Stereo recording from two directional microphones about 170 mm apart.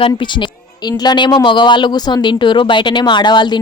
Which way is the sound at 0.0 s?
30° left (ahead or behind).